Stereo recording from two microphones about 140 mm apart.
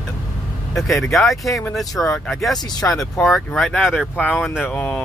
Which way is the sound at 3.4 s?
Centre (ahead or behind).